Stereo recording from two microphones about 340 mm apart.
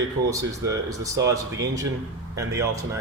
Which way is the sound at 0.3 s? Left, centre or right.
Centre.